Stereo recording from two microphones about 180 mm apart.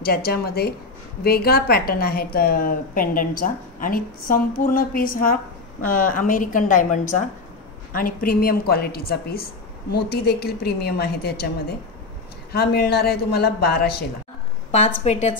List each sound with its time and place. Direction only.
0.0 s a woman's voice: 60° left (ahead or behind)
14.7 s a woman's voice: 40° left (ahead or behind)